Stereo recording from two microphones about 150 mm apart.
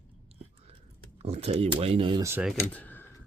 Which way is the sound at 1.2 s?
45° right (ahead or behind).